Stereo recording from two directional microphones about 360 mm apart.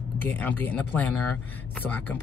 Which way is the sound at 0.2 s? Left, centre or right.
Centre.